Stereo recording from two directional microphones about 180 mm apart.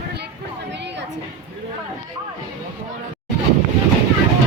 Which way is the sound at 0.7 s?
75° right (ahead or behind).